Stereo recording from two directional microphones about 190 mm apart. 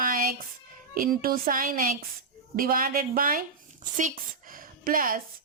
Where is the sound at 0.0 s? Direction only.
50° right (ahead or behind).